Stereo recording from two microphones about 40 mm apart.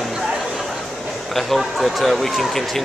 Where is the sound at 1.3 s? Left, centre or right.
Centre.